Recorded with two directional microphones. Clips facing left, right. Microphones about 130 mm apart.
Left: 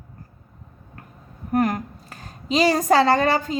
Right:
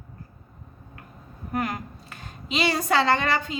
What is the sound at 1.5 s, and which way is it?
A woman's voice, 45° left (ahead or behind).